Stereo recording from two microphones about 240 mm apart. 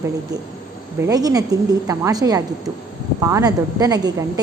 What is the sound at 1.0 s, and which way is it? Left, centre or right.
A woman's voice, centre.